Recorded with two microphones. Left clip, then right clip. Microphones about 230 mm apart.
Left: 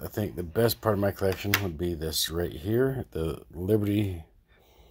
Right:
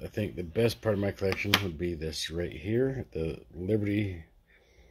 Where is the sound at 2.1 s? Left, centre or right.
Centre.